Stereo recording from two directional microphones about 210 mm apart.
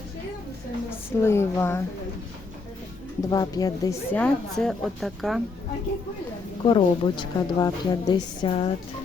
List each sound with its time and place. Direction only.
0.9 s speech: 10° left (ahead or behind)
3.2 s speech: 15° left (ahead or behind)
4.2 s a woman's voice: centre (ahead or behind)
6.7 s a woman's voice: 25° left (ahead or behind)